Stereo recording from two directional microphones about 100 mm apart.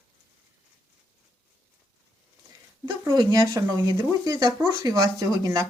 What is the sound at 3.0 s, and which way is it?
Speech, 40° right (ahead or behind).